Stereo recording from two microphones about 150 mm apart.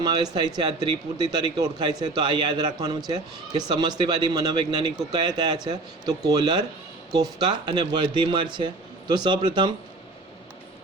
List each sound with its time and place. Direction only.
0.0 s a man's voice: 30° right (ahead or behind)